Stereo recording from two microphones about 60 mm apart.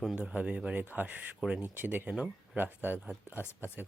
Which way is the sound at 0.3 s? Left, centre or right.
Centre.